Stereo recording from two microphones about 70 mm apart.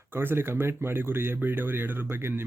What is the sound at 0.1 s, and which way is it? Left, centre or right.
Speech, right.